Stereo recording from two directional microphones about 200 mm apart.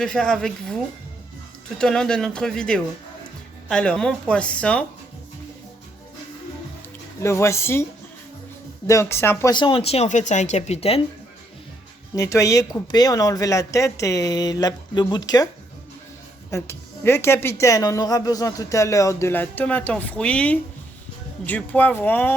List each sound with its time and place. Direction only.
0.0 s speech: 5° left (ahead or behind)
1.8 s speech: 5° left (ahead or behind)
7.2 s speech: 15° left (ahead or behind)
8.9 s speech: 15° left (ahead or behind); by 11.0 s 30° left (ahead or behind)
12.1 s speech: 15° left (ahead or behind)
16.5 s speech: 15° left (ahead or behind)